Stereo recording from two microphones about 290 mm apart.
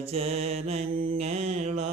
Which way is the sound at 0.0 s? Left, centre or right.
Right.